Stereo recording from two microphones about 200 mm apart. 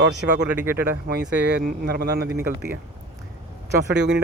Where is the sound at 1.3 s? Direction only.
60° right (ahead or behind).